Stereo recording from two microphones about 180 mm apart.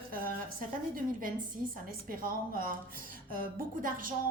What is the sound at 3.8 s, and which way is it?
Speech, 50° right (ahead or behind).